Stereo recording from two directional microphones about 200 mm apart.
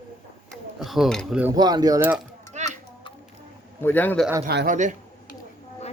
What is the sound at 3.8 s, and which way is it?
Speech, 10° left (ahead or behind).